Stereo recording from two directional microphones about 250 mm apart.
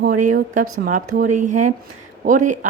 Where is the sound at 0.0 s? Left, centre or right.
Right.